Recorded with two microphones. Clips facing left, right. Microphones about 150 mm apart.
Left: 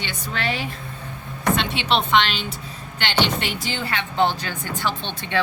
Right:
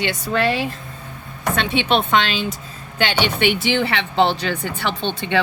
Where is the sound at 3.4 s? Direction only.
75° right (ahead or behind).